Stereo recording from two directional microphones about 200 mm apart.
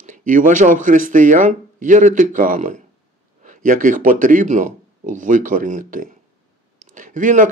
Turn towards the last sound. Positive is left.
turn(degrees=-40)  # may be behind; listen again after turning